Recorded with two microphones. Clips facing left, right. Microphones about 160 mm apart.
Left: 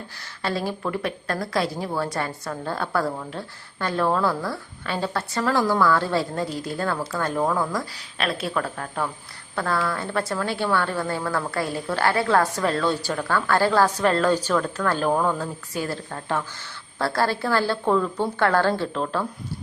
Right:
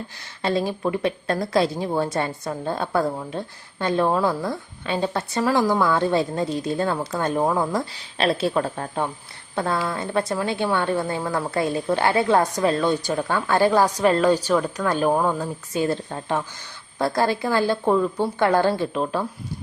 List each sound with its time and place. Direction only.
0.4 s a woman's voice: 20° right (ahead or behind)